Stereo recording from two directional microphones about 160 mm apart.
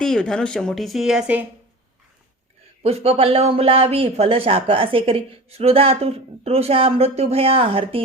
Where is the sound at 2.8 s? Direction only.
40° right (ahead or behind).